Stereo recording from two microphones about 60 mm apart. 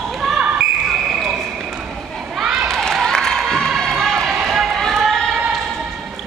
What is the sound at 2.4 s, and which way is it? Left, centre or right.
Children playing, centre.